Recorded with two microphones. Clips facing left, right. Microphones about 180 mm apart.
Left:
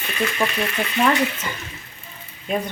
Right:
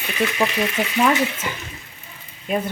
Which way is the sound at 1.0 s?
5° right (ahead or behind).